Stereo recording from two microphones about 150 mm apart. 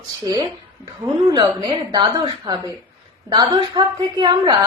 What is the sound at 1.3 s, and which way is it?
A woman's voice, 30° right (ahead or behind).